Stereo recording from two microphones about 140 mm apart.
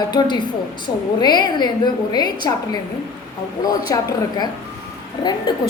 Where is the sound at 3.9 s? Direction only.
25° left (ahead or behind).